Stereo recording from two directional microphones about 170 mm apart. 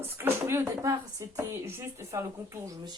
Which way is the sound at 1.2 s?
15° right (ahead or behind).